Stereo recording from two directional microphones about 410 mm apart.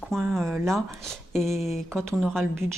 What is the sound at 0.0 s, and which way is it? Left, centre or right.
Speech, centre.